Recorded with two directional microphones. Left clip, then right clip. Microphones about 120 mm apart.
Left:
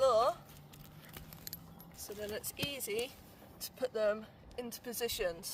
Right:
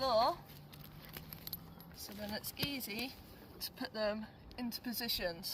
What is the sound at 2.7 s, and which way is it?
Speech, 85° left.